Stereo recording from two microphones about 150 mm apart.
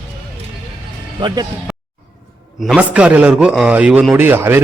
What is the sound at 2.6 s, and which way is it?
A man's voice, 5° right (ahead or behind).